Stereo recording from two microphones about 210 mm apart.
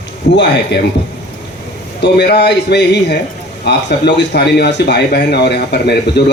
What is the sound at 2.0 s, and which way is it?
Speech, 55° left (ahead or behind).